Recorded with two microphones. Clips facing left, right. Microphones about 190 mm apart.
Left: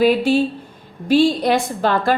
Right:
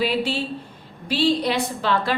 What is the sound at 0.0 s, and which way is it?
A woman's voice, 45° left (ahead or behind).